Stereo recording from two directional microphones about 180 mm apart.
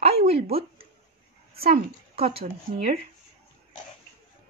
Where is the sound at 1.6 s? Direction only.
55° right (ahead or behind).